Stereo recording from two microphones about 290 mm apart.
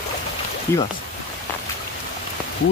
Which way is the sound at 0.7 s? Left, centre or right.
Centre.